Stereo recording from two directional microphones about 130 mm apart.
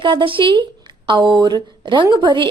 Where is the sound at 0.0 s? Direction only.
40° right (ahead or behind).